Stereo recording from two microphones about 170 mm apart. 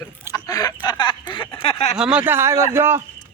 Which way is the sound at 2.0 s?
5° right (ahead or behind).